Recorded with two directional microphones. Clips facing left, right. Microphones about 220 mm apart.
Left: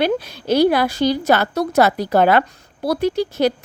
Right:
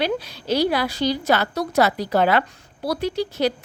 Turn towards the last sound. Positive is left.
turn(degrees=50)  # may be behind; listen again after turning